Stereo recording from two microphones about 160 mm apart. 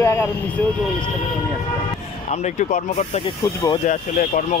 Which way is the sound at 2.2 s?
45° left (ahead or behind).